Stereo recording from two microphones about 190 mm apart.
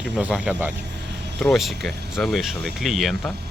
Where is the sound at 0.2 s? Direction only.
5° right (ahead or behind).